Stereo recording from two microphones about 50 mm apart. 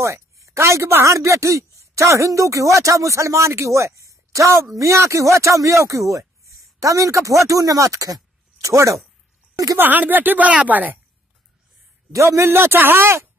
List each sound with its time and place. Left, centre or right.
0.0 s a sound: right
1.0 s speech: right
9.8 s speech: right
12.1 s a man's voice: right
12.4 s speech: right